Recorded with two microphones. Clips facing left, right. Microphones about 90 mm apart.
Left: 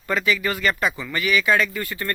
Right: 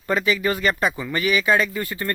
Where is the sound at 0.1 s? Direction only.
25° right (ahead or behind).